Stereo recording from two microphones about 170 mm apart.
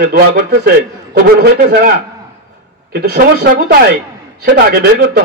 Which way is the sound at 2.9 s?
65° right (ahead or behind).